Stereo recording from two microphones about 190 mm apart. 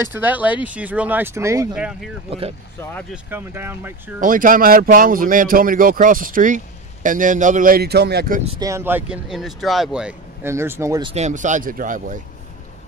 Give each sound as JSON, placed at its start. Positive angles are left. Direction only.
{"t": 0.1, "sound": "speech", "side_deg": -10}
{"t": 1.7, "sound": "speech", "side_deg": -5}
{"t": 2.8, "sound": "speech", "side_deg": 10}
{"t": 3.1, "sound": "speech", "side_deg": -10}
{"t": 4.2, "sound": "speech", "side_deg": -45}
{"t": 8.5, "sound": "speech", "side_deg": -20}
{"t": 11.1, "sound": "speech", "side_deg": -35}